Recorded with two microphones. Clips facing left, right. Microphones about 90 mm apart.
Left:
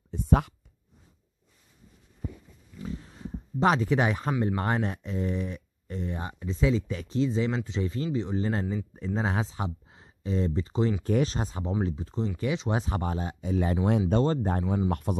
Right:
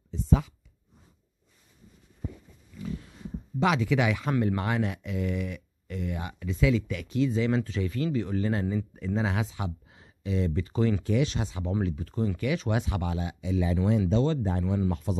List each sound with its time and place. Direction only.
0.1 s speech: 55° left (ahead or behind)
3.5 s speech: 35° left (ahead or behind)
11.1 s speech: 40° left (ahead or behind)
11.8 s speech: 25° left (ahead or behind); by 13.7 s 45° left (ahead or behind)
13.8 s speech: 60° left (ahead or behind)
14.2 s speech: 45° left (ahead or behind)
14.9 s speech: 60° left (ahead or behind)